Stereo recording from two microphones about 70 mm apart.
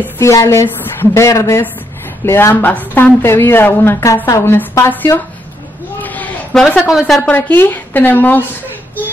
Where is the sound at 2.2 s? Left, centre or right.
Left.